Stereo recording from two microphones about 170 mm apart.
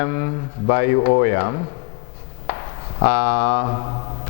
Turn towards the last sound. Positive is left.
turn(degrees=30)  # may be behind; listen again after turning